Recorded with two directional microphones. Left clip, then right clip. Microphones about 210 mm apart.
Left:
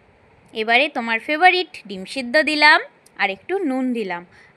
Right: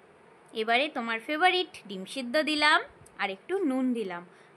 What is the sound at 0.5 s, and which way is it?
A woman's voice, 15° left (ahead or behind).